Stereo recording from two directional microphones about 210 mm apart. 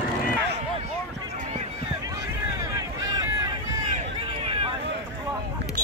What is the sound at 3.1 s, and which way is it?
Run, 20° right (ahead or behind).